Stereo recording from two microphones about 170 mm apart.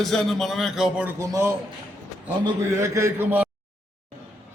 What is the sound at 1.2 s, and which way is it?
Speech, 15° right (ahead or behind).